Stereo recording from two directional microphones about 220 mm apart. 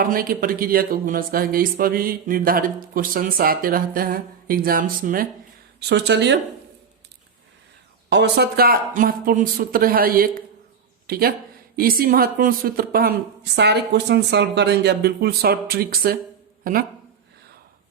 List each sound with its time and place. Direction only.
0.0 s speech: 40° right (ahead or behind)
5.9 s a woman's voice: 50° right (ahead or behind)
8.1 s a woman's voice: 50° right (ahead or behind)